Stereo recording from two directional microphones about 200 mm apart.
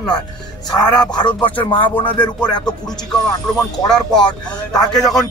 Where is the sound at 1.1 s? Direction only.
25° left (ahead or behind).